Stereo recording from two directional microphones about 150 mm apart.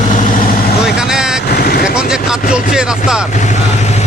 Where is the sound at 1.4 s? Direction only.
90° left.